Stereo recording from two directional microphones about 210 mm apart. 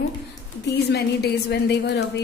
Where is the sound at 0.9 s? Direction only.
50° left (ahead or behind).